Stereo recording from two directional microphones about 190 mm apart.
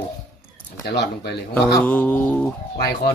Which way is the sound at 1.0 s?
60° left (ahead or behind).